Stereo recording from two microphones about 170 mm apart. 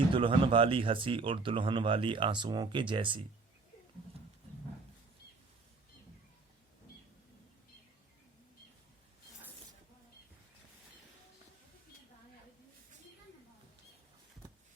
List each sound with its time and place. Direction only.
0.1 s speech: 30° right (ahead or behind)